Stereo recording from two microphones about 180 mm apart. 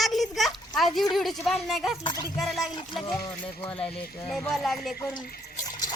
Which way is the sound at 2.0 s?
20° left (ahead or behind).